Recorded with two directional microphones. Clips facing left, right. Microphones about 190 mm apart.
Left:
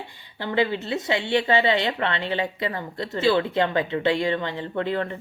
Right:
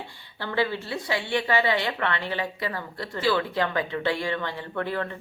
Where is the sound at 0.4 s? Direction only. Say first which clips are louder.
Left 3 dB; 20° left (ahead or behind).